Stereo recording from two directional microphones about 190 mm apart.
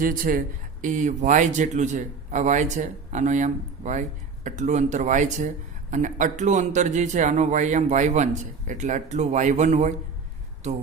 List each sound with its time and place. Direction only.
0.0 s a man's voice: 45° right (ahead or behind)